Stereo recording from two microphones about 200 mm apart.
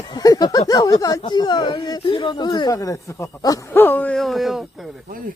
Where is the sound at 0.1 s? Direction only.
20° left (ahead or behind).